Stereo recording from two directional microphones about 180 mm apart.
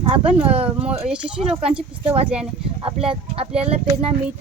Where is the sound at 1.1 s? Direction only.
5° right (ahead or behind).